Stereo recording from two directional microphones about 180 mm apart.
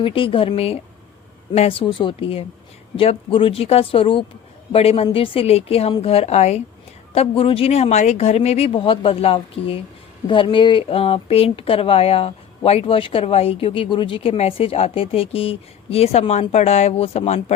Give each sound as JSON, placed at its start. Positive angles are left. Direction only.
{"t": 0.0, "sound": "speech", "side_deg": 30}